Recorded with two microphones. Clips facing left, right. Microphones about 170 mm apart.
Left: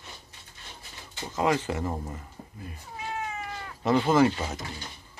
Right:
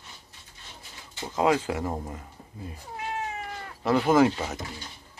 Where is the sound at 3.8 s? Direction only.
Centre (ahead or behind).